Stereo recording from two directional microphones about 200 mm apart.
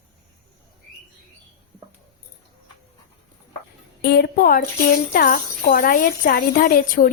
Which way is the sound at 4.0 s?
50° left (ahead or behind).